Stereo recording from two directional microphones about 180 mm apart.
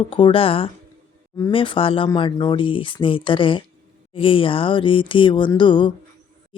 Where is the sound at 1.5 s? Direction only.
30° left (ahead or behind).